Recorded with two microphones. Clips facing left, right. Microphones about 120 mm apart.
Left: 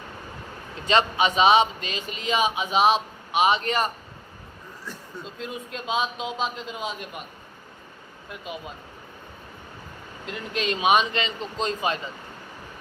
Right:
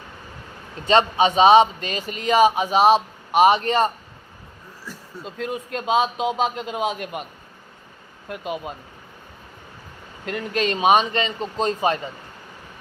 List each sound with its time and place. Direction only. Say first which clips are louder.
0.9 s a man's voice: right 4 dB; 35° right (ahead or behind)
3.7 s a man's voice: right 5 dB; 30° right (ahead or behind)
5.2 s a man's voice: right 7 dB; 50° right (ahead or behind); by 7.3 s 75° right (ahead or behind)
8.3 s speech: right 7 dB; 55° right (ahead or behind)
10.2 s a man's voice: right 5 dB; 50° right (ahead or behind)